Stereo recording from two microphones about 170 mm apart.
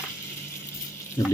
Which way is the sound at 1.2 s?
20° left (ahead or behind).